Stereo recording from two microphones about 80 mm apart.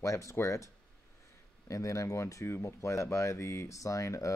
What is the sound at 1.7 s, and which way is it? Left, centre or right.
Speech, left.